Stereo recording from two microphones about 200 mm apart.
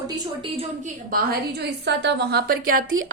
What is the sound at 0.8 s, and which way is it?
A woman's voice, 45° right (ahead or behind).